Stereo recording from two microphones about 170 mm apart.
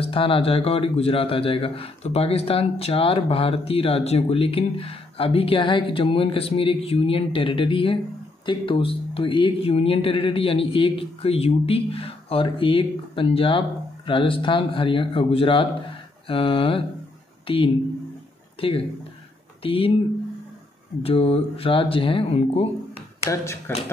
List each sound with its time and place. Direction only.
0.0 s a man's voice: 35° left (ahead or behind)
21.0 s a man's voice: 35° left (ahead or behind)
23.2 s speech: 15° left (ahead or behind)